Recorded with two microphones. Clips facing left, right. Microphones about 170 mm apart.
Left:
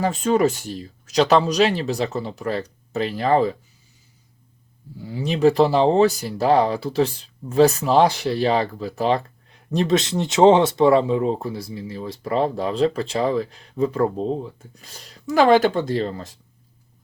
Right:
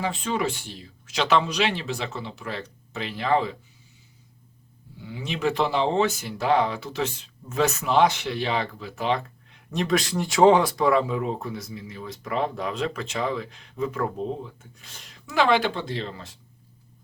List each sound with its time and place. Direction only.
0.0 s speech: 45° left (ahead or behind)
4.9 s speech: 35° left (ahead or behind)